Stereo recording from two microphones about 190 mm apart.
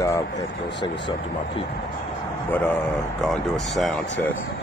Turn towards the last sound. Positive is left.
turn(degrees=0)  # may be behind; listen again after turning